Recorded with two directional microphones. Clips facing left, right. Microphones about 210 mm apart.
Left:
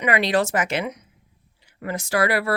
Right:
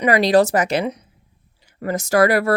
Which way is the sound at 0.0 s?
35° right (ahead or behind).